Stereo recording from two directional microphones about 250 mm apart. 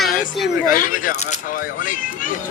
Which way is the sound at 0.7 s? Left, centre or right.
Left.